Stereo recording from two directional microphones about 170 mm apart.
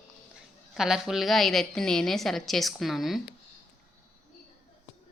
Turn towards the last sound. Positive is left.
turn(degrees=0)  # may be behind; listen again after turning